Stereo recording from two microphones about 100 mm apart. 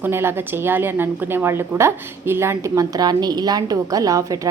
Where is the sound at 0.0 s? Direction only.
25° right (ahead or behind).